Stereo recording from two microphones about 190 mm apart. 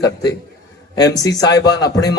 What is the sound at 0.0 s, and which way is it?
A man's voice, 20° left (ahead or behind).